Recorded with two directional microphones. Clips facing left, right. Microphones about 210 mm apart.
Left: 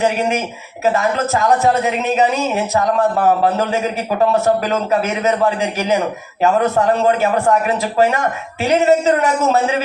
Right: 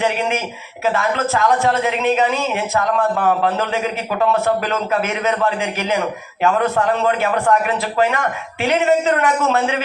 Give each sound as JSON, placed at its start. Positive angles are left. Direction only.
{"t": 0.0, "sound": "a man's voice", "side_deg": 40}